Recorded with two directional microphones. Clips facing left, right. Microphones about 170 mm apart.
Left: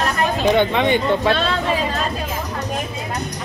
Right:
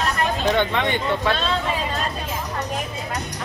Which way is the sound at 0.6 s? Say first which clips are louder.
Left 5 dB; 15° left (ahead or behind).